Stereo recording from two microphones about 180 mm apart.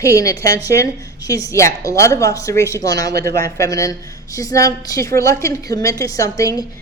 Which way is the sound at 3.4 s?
20° left (ahead or behind).